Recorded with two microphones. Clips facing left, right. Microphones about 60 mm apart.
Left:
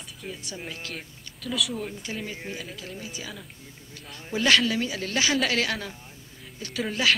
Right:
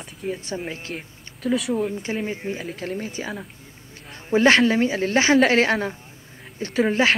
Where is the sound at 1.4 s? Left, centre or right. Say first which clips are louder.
Right 9 dB; right.